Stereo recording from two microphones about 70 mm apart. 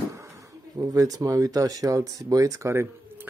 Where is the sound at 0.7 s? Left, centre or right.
Right.